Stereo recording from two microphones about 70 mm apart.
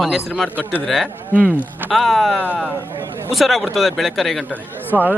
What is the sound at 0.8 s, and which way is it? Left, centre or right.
Speech, centre.